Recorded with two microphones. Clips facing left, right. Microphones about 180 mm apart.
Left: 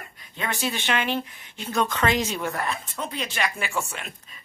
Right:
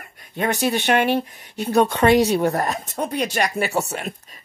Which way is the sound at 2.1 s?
65° right (ahead or behind).